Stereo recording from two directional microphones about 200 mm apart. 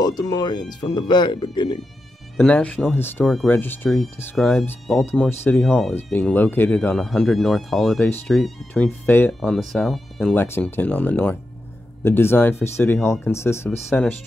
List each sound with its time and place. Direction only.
0.0 s speech: 20° left (ahead or behind)
2.3 s speech: 5° left (ahead or behind)
10.3 s speech: 10° left (ahead or behind)